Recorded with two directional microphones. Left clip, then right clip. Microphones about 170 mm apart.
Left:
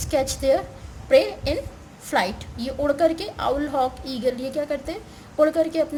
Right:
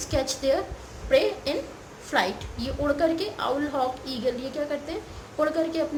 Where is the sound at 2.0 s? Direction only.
55° left (ahead or behind).